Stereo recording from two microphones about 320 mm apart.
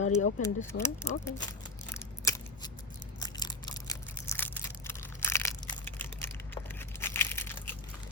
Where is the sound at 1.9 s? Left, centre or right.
Centre.